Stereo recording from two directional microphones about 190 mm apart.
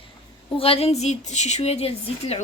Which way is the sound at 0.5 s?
30° left (ahead or behind).